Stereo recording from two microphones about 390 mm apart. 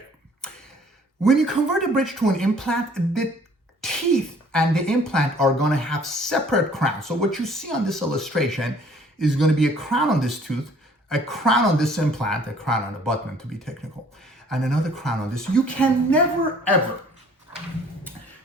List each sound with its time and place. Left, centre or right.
1.2 s speech: centre
3.8 s sneeze: centre
4.5 s speech: centre